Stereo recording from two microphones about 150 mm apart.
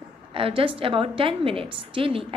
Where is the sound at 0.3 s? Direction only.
35° right (ahead or behind).